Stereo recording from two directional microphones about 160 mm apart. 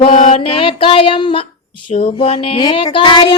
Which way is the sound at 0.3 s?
35° left (ahead or behind).